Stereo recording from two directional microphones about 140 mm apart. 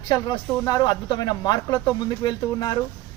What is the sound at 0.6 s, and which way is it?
A man's voice, 25° left (ahead or behind).